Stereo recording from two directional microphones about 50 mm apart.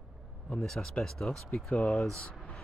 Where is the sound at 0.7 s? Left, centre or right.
Centre.